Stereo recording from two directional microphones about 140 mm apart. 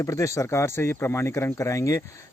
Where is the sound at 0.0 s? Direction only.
20° left (ahead or behind).